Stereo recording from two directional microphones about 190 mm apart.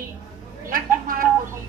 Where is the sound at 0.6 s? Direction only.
50° right (ahead or behind).